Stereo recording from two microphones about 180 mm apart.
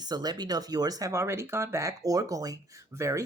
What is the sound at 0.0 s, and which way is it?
Speech, 20° right (ahead or behind).